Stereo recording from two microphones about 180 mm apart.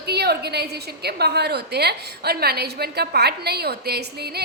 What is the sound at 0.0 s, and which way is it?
A woman's voice, 65° right (ahead or behind).